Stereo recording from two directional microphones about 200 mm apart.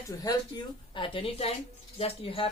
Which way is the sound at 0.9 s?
25° left (ahead or behind).